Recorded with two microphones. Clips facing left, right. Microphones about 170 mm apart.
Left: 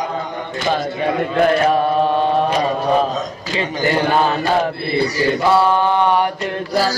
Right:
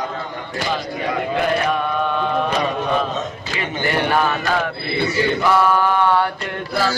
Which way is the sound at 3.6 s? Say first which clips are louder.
Left 3 dB; 25° left (ahead or behind).